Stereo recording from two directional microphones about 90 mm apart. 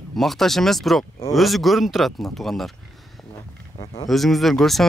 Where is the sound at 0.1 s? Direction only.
Centre (ahead or behind).